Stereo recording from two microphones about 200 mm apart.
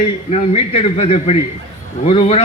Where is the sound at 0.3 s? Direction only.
30° left (ahead or behind).